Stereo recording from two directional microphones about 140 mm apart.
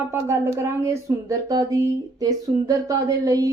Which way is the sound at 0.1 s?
20° right (ahead or behind).